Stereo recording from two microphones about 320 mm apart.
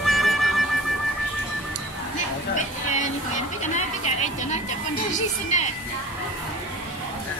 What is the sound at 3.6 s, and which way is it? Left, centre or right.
A woman's voice, left.